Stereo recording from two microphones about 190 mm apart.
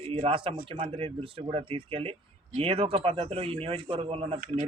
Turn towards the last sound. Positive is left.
turn(degrees=-30)  # may be behind; listen again after turning